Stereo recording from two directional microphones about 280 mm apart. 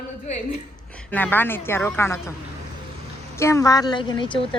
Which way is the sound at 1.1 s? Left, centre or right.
Centre.